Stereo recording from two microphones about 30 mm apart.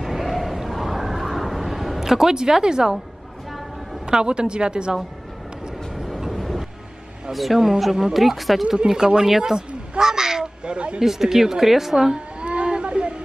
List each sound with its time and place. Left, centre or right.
0.0 s a sound: centre; by 3.0 s right
4.0 s a woman's voice: right
5.9 s vehicle: centre
7.3 s a woman's voice: centre
8.8 s a woman's voice: right
10.6 s speech: right
11.0 s a woman's voice: centre
12.1 s a sound: right